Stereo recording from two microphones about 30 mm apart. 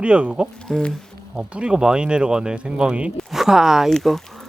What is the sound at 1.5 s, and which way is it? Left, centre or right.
Speech, right.